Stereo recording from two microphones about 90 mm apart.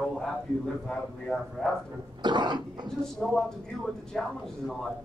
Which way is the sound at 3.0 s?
5° left (ahead or behind).